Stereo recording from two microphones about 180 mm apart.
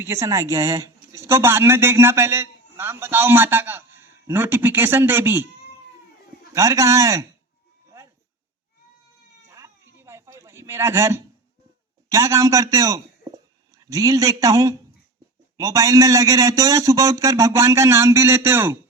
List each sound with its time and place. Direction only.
0.0 s a man's voice: 15° right (ahead or behind)
6.5 s a man's voice: 15° right (ahead or behind)
7.9 s a sound: 15° right (ahead or behind)
9.5 s cat: 15° right (ahead or behind)
12.1 s a man's voice: 15° right (ahead or behind)